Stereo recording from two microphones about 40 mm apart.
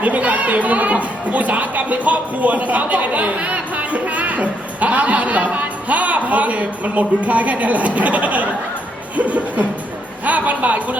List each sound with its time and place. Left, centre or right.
0.0 s speech: right